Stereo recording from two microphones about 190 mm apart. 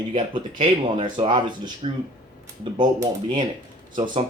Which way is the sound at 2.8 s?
25° right (ahead or behind).